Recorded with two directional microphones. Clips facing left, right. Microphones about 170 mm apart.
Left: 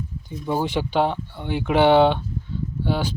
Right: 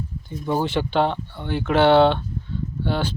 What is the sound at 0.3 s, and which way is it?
Speech, 10° left (ahead or behind).